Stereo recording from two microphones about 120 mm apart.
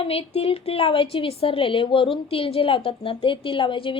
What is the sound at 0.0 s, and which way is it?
A woman's voice, 55° left (ahead or behind).